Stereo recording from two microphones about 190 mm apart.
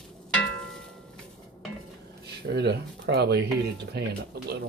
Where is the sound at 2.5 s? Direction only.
65° right (ahead or behind).